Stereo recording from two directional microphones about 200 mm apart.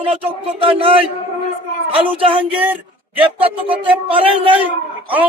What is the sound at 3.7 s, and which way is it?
Speech, 25° right (ahead or behind).